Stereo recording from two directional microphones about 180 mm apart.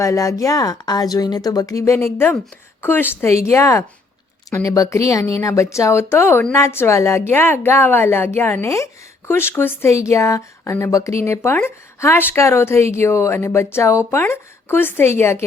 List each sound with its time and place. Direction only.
0.0 s speech: 20° left (ahead or behind)